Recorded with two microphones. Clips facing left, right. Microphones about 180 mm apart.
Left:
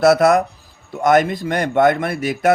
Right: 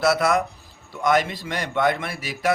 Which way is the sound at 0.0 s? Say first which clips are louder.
Left 7 dB; 45° left (ahead or behind).